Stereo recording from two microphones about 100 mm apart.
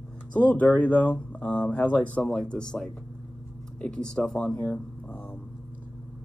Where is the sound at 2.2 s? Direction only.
5° left (ahead or behind).